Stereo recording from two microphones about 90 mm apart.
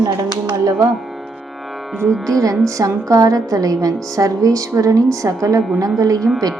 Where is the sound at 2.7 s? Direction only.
40° right (ahead or behind).